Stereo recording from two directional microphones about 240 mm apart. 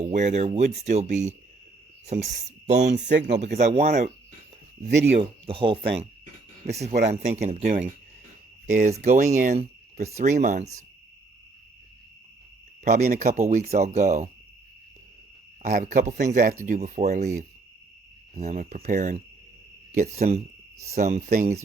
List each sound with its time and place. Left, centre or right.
0.0 s speech: right
5.2 s speech: right
12.8 s speech: right
15.6 s speech: right
18.3 s speech: right